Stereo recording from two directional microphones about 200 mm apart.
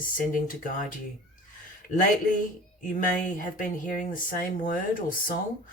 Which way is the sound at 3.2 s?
40° left (ahead or behind).